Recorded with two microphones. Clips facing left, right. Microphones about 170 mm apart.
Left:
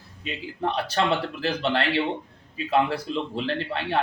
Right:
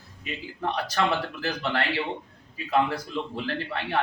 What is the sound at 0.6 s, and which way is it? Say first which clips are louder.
A man's voice: left 2 dB; 30° left (ahead or behind).